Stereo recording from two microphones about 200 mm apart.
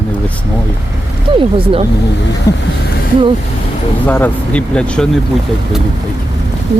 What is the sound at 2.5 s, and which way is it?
Speech, 15° left (ahead or behind).